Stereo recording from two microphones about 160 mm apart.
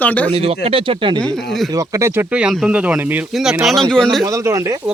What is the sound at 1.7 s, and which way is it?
Speech, 20° right (ahead or behind).